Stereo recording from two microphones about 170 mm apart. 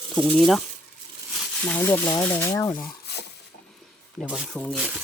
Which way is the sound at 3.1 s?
75° left (ahead or behind).